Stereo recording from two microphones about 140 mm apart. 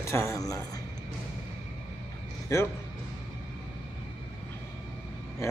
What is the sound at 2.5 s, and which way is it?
Speech, 20° left (ahead or behind).